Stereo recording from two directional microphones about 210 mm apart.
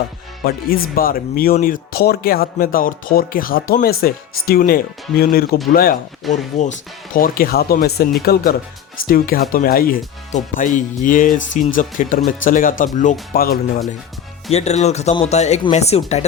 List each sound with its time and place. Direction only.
0.4 s speech: 45° left (ahead or behind)
14.5 s speech: 30° left (ahead or behind)